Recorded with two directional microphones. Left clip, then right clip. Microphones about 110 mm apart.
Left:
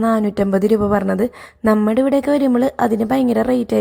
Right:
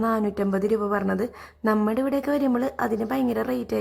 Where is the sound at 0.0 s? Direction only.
35° left (ahead or behind).